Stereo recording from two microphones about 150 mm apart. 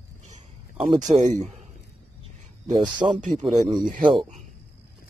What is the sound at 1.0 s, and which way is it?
Speech, 50° right (ahead or behind).